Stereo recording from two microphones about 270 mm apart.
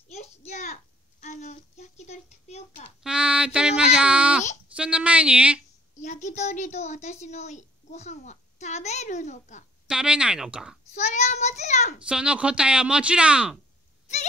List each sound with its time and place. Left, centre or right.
0.1 s a sound: left
3.0 s child singing: centre
4.7 s a woman's voice: centre
5.9 s a woman's voice: left
9.8 s a woman's voice: centre
11.0 s a child's voice: left
12.1 s a woman's voice: centre